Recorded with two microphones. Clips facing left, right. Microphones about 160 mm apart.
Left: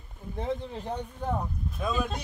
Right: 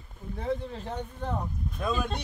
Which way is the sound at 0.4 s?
15° left (ahead or behind).